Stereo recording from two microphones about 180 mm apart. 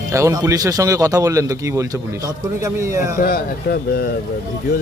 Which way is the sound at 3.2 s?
55° left (ahead or behind).